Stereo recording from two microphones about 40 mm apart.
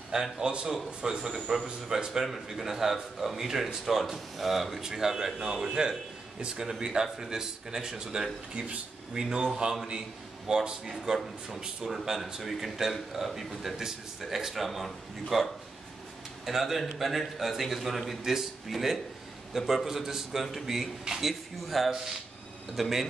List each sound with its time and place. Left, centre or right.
0.1 s speech: centre
1.2 s speech: centre
2.2 s speech: centre; by 9.5 s right
10.5 s speech: centre
16.4 s speech: centre